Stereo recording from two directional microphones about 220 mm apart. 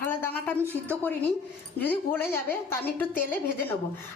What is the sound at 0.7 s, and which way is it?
A woman's voice, 10° left (ahead or behind).